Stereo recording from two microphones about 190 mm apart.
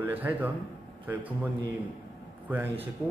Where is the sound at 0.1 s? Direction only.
10° right (ahead or behind).